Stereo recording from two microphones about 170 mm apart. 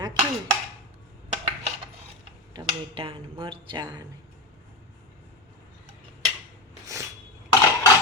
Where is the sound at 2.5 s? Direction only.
30° right (ahead or behind).